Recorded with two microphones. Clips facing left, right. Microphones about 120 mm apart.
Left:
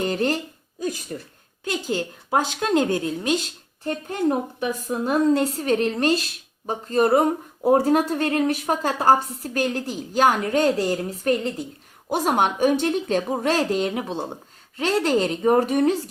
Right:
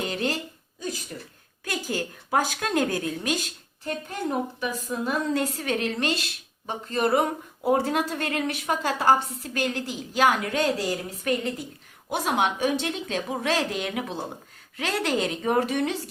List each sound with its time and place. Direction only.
0.0 s a woman's voice: 40° left (ahead or behind)
1.6 s a woman's voice: 25° left (ahead or behind)
5.0 s a woman's voice: 35° left (ahead or behind)
12.1 s a woman's voice: 45° left (ahead or behind)